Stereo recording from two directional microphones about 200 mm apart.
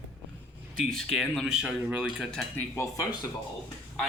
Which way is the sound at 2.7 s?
15° left (ahead or behind).